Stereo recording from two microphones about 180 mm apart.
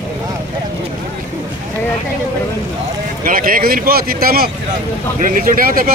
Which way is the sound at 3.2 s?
50° right (ahead or behind).